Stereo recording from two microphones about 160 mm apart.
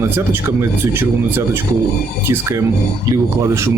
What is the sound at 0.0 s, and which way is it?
Speech, 15° right (ahead or behind).